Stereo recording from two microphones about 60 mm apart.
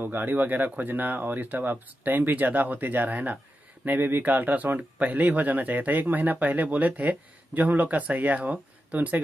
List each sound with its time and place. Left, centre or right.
0.0 s speech: right